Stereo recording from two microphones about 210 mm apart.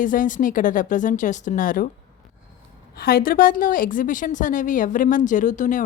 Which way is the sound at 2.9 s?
45° left (ahead or behind).